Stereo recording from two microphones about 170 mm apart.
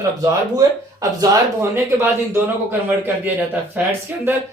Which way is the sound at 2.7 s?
10° right (ahead or behind).